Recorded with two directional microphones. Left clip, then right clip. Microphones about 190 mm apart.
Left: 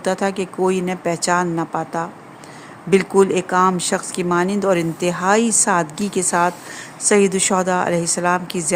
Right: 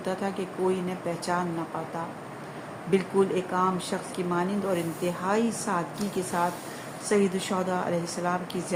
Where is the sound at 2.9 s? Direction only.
60° left (ahead or behind).